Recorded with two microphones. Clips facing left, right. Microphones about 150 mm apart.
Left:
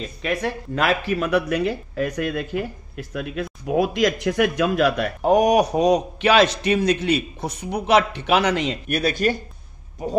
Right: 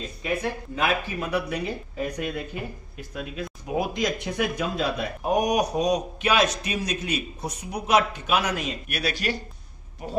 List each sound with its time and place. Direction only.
0.0 s a man's voice: 80° left
8.8 s speech: 50° left (ahead or behind)